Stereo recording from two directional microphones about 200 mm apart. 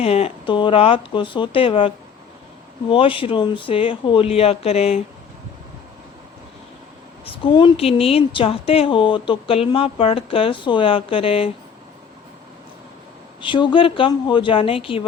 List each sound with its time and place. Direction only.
0.0 s a woman's voice: 30° left (ahead or behind)
2.9 s a woman's voice: 25° left (ahead or behind)
7.3 s a woman's voice: 25° left (ahead or behind)
13.4 s a woman's voice: 25° left (ahead or behind)